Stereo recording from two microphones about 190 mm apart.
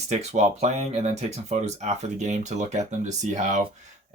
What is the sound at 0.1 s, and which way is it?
Speech, 35° right (ahead or behind).